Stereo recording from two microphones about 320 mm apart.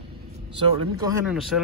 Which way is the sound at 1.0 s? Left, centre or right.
Centre.